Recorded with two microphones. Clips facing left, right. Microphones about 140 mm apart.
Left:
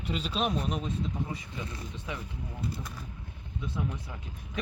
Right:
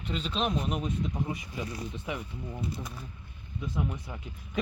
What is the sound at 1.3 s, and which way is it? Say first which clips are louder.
Speech: right 3 dB; 20° right (ahead or behind).